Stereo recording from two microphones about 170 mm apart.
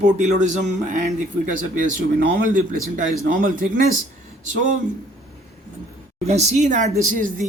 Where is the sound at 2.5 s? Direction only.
50° right (ahead or behind).